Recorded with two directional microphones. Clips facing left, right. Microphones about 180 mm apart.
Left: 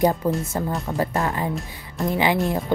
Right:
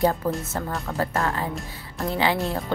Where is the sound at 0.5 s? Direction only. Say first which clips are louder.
Left 3 dB; 15° left (ahead or behind).